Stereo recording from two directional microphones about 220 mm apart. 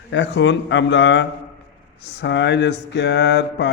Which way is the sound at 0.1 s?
55° left (ahead or behind).